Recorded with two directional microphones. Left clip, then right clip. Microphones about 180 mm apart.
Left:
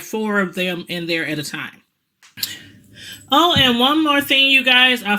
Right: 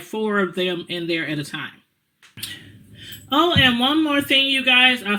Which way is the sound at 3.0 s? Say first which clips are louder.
Left 4 dB; 35° left (ahead or behind).